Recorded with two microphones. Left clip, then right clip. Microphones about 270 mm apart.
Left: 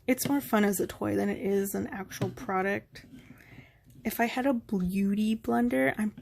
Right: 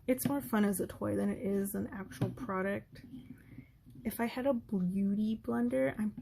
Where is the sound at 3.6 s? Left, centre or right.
Centre.